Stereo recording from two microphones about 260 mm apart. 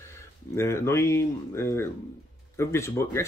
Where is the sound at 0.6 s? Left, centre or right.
Centre.